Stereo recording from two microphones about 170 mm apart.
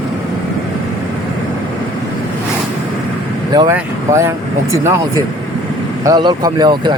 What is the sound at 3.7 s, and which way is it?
Speech, 15° right (ahead or behind).